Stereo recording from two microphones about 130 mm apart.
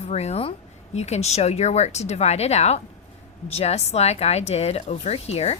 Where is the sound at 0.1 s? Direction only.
55° left (ahead or behind).